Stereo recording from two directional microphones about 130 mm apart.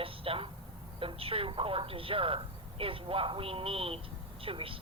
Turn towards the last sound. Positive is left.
turn(degrees=-45)  # may be behind; listen again after turning